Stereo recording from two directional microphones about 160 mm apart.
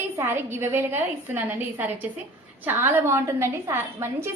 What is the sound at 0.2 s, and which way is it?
A woman's voice, 15° right (ahead or behind).